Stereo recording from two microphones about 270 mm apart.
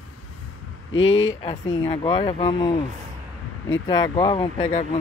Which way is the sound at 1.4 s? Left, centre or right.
Left.